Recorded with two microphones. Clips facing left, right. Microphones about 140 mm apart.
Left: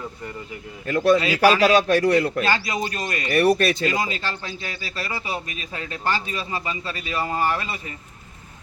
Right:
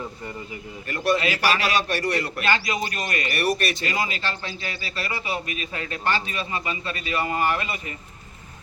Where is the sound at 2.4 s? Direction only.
35° left (ahead or behind).